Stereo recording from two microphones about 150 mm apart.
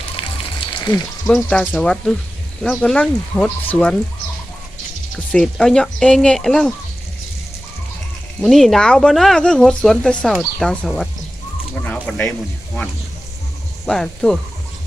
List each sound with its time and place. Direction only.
0.2 s music: 35° left (ahead or behind)
1.3 s speech: 5° left (ahead or behind)
5.1 s speech: 5° left (ahead or behind)
8.4 s speech: centre (ahead or behind)
11.7 s a sound: 5° left (ahead or behind)
13.8 s speech: 5° left (ahead or behind)